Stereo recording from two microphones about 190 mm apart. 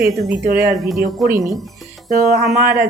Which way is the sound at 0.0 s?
5° right (ahead or behind).